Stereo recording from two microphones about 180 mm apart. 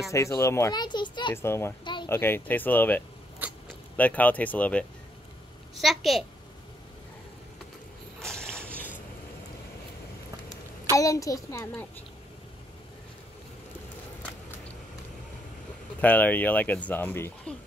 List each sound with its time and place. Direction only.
0.1 s speech: 15° left (ahead or behind)
1.3 s a child's voice: 15° left (ahead or behind)
8.2 s a sound: 5° left (ahead or behind)
10.9 s speech: 20° left (ahead or behind)
16.0 s speech: 10° left (ahead or behind)